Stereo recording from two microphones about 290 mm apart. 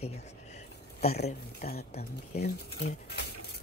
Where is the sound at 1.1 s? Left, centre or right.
Left.